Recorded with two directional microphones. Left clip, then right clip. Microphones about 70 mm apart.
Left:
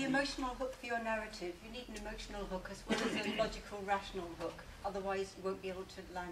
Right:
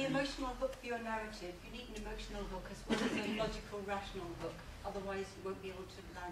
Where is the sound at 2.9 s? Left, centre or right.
Left.